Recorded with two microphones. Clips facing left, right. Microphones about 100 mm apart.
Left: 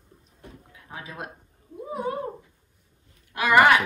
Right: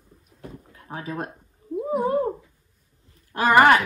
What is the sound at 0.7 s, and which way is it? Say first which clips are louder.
Speech: right 8 dB; 45° right (ahead or behind).